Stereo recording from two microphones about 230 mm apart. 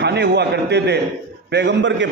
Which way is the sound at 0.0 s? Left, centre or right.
Right.